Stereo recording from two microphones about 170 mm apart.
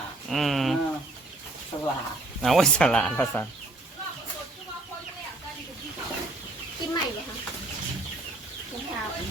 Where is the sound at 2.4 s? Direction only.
Centre (ahead or behind).